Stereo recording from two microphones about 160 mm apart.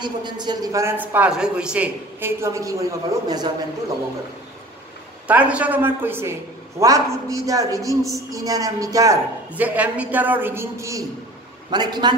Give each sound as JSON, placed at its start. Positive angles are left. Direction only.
{"t": 0.0, "sound": "a man's voice", "side_deg": -30}
{"t": 5.2, "sound": "a woman's voice", "side_deg": -10}
{"t": 9.5, "sound": "a woman's voice", "side_deg": -10}